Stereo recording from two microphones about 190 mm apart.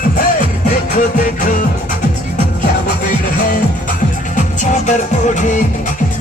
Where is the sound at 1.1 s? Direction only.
45° left (ahead or behind).